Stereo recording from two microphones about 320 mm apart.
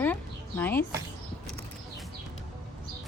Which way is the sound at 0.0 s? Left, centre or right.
Centre.